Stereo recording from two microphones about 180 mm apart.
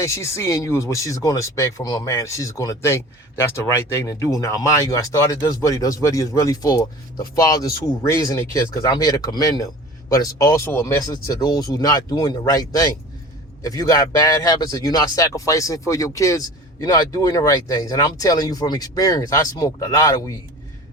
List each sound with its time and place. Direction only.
0.0 s speech: 15° left (ahead or behind)